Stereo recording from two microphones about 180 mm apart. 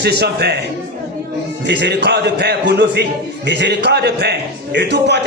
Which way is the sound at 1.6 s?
75° right (ahead or behind).